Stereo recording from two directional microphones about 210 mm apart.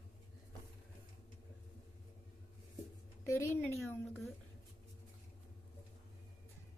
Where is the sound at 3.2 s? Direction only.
15° left (ahead or behind).